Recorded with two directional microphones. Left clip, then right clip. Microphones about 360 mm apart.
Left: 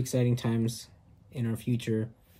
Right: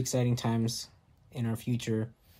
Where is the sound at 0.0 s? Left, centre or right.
Centre.